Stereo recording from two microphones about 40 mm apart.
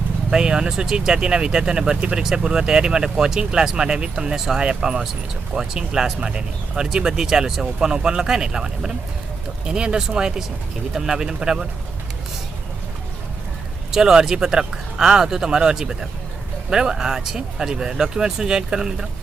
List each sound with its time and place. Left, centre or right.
0.3 s speech: centre
4.4 s speech: centre
4.7 s speech: right
13.9 s speech: centre